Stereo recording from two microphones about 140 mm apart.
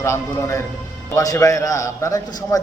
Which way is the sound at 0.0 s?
20° left (ahead or behind).